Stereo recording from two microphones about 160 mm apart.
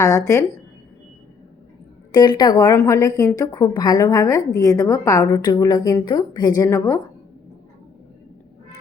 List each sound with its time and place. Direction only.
0.0 s a woman's voice: 20° left (ahead or behind)
2.1 s a woman's voice: 25° left (ahead or behind)